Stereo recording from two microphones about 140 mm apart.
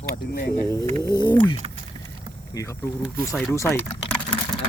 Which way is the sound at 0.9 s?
25° left (ahead or behind).